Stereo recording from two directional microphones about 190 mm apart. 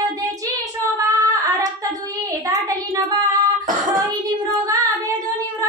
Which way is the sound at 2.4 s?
15° right (ahead or behind).